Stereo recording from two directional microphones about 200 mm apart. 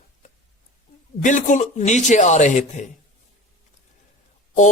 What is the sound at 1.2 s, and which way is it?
Speech, 40° left (ahead or behind).